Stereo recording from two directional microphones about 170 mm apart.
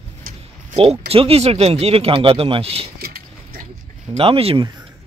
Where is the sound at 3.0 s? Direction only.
60° right (ahead or behind).